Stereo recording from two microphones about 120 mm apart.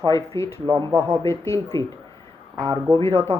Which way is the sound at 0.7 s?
45° right (ahead or behind).